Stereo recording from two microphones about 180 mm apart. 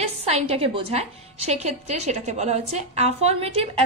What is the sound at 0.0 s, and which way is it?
A woman's voice, 35° right (ahead or behind).